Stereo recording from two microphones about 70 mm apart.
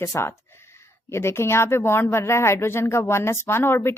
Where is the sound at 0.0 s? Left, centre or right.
Left.